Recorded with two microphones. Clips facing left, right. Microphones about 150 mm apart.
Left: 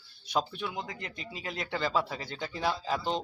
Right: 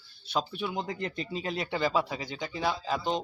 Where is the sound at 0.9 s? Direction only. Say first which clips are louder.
Right 8 dB; 30° right (ahead or behind); by 2.6 s 10° right (ahead or behind).